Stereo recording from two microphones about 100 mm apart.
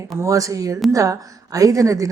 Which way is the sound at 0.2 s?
35° right (ahead or behind).